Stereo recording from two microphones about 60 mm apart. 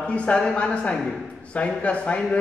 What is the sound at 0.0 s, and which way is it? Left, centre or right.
A man's voice, centre.